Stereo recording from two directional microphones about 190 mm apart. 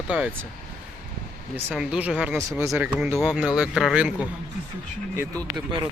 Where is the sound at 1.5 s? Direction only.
5° right (ahead or behind).